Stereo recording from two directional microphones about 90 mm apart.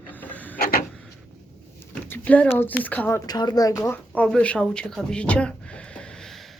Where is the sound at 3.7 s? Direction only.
30° left (ahead or behind).